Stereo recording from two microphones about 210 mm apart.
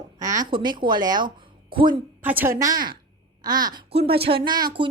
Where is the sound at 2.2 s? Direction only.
10° right (ahead or behind).